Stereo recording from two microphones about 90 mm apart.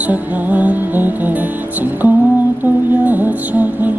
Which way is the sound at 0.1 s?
15° right (ahead or behind).